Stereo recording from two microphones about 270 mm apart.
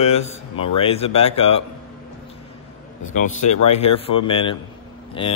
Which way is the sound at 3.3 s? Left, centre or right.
Left.